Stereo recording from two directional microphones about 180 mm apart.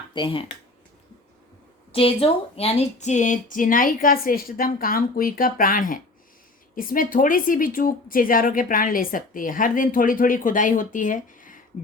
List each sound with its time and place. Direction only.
0.1 s speech: 25° left (ahead or behind)
1.9 s a woman's voice: 30° left (ahead or behind); by 11.6 s 50° left (ahead or behind)